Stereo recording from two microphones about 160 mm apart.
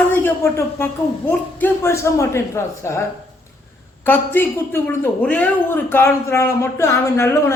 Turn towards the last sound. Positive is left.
turn(degrees=15)  # may be behind; listen again after turning